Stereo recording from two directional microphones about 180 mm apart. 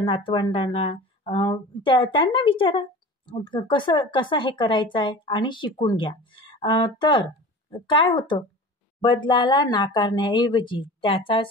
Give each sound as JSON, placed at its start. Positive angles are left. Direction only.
{"t": 0.0, "sound": "speech", "side_deg": 25}